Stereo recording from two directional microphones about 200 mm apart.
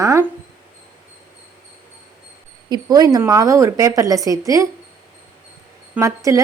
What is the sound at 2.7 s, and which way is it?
A woman's voice, 20° right (ahead or behind).